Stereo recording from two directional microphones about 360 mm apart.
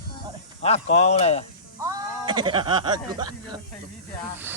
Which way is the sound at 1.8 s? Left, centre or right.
Centre.